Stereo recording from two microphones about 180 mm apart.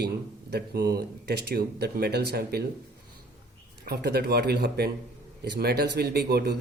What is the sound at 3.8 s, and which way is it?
Speech, 65° right (ahead or behind).